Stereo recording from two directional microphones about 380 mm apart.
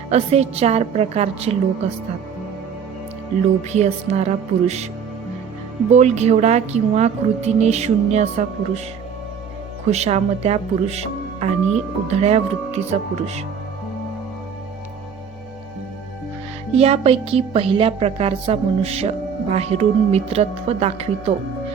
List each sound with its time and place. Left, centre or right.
0.1 s a woman's voice: centre
3.7 s a woman's voice: centre
5.9 s a woman's voice: centre
9.9 s a woman's voice: centre
16.7 s a woman's voice: centre